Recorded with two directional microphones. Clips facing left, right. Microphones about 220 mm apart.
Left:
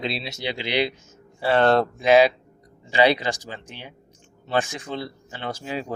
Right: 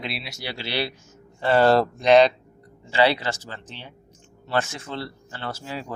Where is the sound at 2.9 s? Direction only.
15° left (ahead or behind).